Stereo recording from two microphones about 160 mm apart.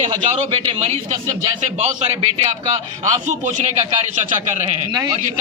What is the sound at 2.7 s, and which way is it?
A man's voice, 50° right (ahead or behind).